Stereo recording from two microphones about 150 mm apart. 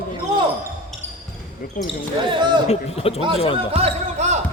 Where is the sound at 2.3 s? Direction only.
30° right (ahead or behind).